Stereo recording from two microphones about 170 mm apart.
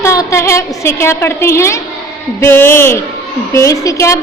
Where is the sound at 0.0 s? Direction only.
15° left (ahead or behind).